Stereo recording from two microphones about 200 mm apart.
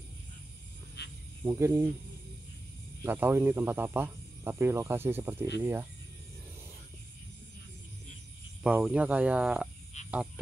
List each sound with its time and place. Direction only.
1.0 s insect: 55° left (ahead or behind)
1.4 s speech: 15° right (ahead or behind)
3.0 s speech: 10° right (ahead or behind)
8.6 s speech: 5° right (ahead or behind)
9.9 s cricket: 35° left (ahead or behind)